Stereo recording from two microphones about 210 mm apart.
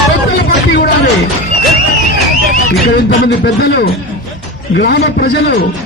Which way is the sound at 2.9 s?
50° left (ahead or behind).